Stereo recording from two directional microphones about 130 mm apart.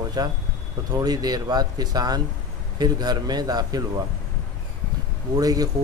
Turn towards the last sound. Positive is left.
turn(degrees=-30)  # may be behind; listen again after turning